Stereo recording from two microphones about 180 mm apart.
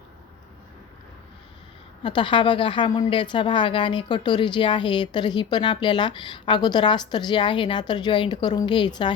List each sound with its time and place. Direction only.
2.0 s a woman's voice: 25° left (ahead or behind)